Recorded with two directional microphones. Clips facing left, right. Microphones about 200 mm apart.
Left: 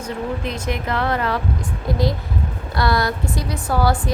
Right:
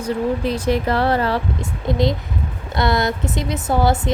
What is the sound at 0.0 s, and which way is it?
A woman's voice, 35° right (ahead or behind).